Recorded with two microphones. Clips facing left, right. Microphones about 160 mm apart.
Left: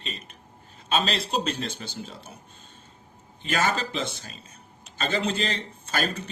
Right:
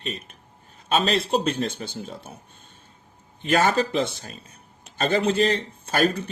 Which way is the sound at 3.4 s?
55° right (ahead or behind).